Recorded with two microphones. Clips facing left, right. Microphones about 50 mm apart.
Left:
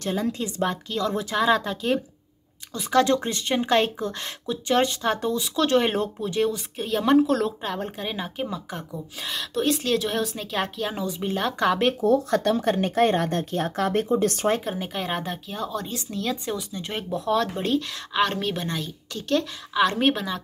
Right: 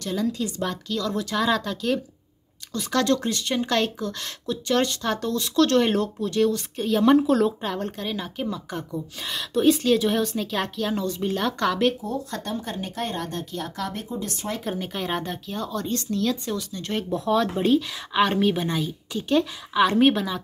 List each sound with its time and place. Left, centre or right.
0.0 s speech: left; by 11.9 s centre
12.3 s speech: left
12.7 s speech: left
14.6 s speech: centre